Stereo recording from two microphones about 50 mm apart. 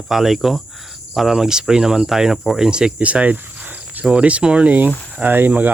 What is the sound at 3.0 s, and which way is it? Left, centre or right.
Cricket, right.